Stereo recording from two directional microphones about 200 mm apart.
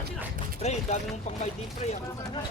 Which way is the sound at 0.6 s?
35° left (ahead or behind).